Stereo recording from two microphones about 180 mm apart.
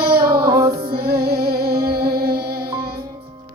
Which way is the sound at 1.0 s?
60° right (ahead or behind).